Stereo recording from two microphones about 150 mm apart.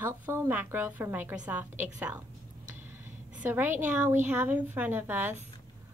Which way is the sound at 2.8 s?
15° right (ahead or behind).